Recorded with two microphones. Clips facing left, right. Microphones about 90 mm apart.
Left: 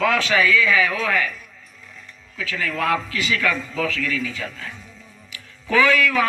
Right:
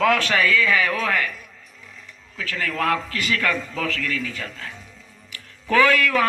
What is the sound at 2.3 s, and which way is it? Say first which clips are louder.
A man's voice: even; 45° right (ahead or behind).